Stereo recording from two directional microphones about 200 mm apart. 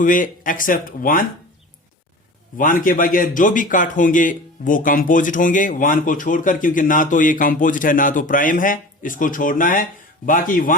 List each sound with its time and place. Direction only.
0.0 s speech: 40° left (ahead or behind)
2.6 s a man's voice: 40° left (ahead or behind)